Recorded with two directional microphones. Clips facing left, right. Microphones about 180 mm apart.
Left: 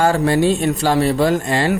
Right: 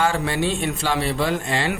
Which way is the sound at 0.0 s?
40° left (ahead or behind).